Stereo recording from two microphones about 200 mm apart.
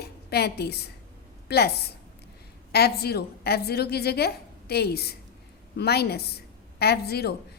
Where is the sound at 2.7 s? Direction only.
55° left (ahead or behind).